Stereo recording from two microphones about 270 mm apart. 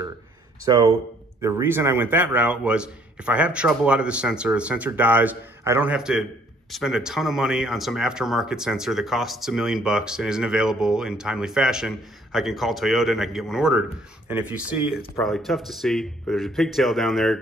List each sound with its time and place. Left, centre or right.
0.7 s speech: centre